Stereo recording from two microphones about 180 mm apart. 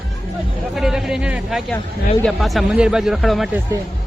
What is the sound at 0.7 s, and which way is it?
Speech, centre (ahead or behind).